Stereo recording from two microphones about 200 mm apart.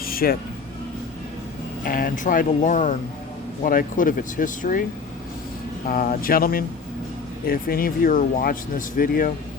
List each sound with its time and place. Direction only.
0.0 s music: 45° left (ahead or behind)
1.8 s speech: 45° left (ahead or behind)
5.8 s speech: 45° left (ahead or behind)